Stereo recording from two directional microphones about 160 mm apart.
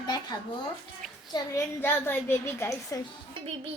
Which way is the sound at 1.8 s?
15° left (ahead or behind).